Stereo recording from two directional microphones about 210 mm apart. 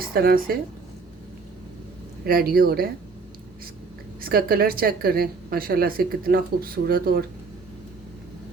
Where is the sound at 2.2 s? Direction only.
45° right (ahead or behind).